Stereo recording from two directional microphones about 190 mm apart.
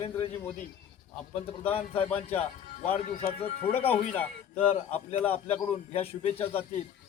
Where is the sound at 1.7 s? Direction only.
30° left (ahead or behind); by 3.4 s 50° left (ahead or behind).